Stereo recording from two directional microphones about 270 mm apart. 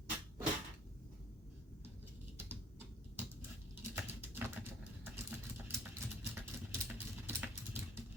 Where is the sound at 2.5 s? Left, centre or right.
Centre.